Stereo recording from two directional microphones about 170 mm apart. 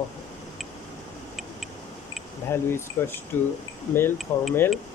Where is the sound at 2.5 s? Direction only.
15° left (ahead or behind).